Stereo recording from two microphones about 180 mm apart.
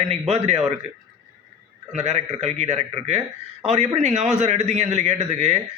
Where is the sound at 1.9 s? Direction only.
40° right (ahead or behind).